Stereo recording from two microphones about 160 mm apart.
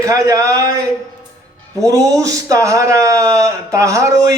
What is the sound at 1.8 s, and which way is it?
Speech, 20° right (ahead or behind).